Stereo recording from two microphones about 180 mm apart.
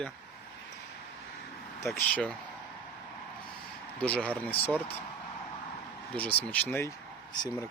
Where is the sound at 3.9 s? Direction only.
5° left (ahead or behind).